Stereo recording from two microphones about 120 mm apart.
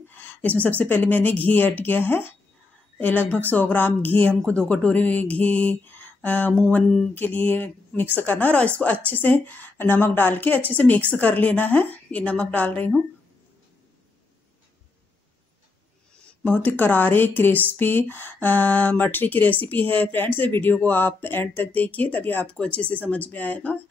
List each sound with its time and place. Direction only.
0.1 s a woman's voice: 15° left (ahead or behind)
16.2 s a woman's voice: 10° left (ahead or behind)